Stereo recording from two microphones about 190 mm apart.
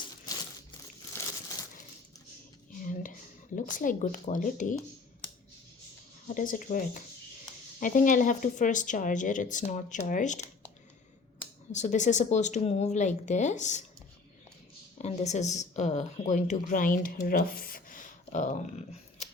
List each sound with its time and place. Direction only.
3.5 s speech: 45° left (ahead or behind)
6.2 s speech: 45° left (ahead or behind)
11.7 s speech: 40° left (ahead or behind)
14.9 s speech: 35° left (ahead or behind)